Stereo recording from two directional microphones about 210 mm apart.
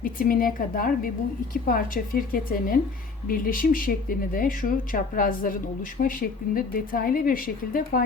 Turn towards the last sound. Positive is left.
turn(degrees=40)  # may be behind; listen again after turning